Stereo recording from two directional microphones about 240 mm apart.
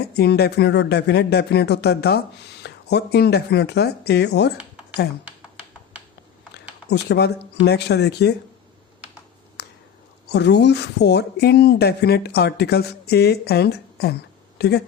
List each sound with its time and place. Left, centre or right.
0.1 s speech: left
6.9 s speech: left
9.6 s a sound: left
10.2 s speech: left